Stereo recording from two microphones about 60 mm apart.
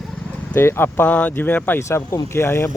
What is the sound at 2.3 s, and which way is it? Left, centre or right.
Speech, left.